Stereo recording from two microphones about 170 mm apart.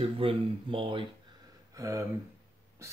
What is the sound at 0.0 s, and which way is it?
Speech, 30° right (ahead or behind).